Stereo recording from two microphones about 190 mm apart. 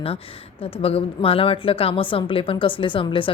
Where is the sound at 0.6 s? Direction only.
30° left (ahead or behind).